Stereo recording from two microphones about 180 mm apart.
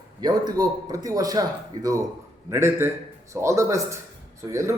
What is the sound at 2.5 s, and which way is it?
A man's voice, 15° right (ahead or behind).